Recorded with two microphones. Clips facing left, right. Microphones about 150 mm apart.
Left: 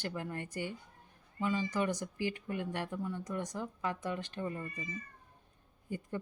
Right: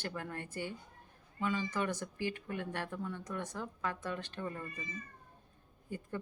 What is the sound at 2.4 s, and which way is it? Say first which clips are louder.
Speech: left 2 dB; 10° left (ahead or behind).